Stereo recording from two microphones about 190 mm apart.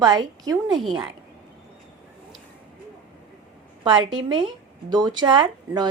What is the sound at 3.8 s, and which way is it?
Speech, 25° right (ahead or behind).